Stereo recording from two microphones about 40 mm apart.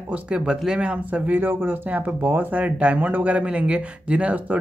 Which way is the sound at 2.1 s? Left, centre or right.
Right.